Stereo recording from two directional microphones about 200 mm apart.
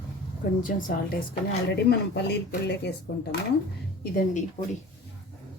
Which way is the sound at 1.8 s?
55° left (ahead or behind).